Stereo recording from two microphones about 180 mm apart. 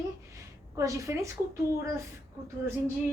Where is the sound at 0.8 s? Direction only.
15° right (ahead or behind).